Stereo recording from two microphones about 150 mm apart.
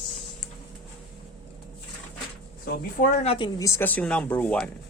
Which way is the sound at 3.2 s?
40° left (ahead or behind).